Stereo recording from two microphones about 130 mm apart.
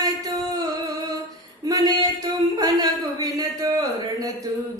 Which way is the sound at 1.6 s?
30° right (ahead or behind).